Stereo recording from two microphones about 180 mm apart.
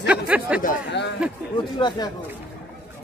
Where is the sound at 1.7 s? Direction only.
25° left (ahead or behind).